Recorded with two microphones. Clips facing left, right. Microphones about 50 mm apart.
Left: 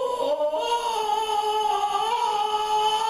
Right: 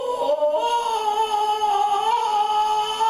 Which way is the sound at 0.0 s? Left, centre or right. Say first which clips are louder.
Right 2 dB; right.